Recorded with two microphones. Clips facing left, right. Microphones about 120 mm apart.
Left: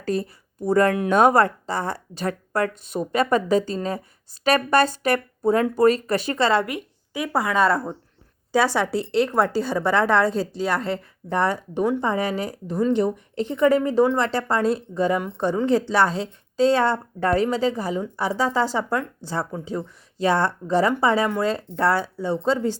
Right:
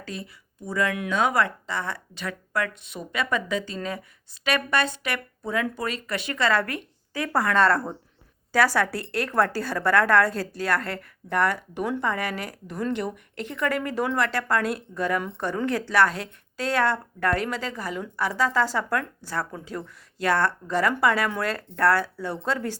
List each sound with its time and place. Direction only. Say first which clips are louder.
0.0 s a woman's voice: left 11 dB; 45° left (ahead or behind); by 7.9 s 10° left (ahead or behind)
8.5 s a woman's voice: left 2 dB; 20° left (ahead or behind)